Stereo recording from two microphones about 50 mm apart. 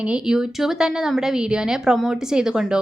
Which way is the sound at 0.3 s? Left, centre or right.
Centre.